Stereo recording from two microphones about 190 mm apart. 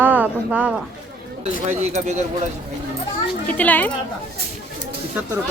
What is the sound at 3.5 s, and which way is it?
Speech, 10° left (ahead or behind).